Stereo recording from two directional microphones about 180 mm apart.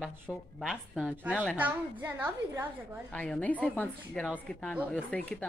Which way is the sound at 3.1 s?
5° left (ahead or behind).